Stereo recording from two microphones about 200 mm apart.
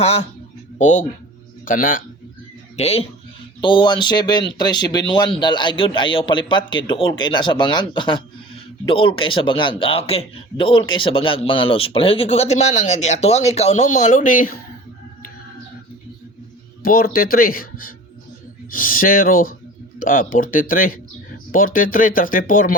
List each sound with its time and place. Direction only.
0.0 s speech: 30° left (ahead or behind)
2.7 s speech: 30° left (ahead or behind)
16.8 s speech: 45° left (ahead or behind)